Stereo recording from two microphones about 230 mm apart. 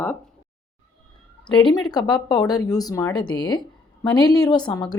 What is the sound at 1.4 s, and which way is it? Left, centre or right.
A woman's voice, centre.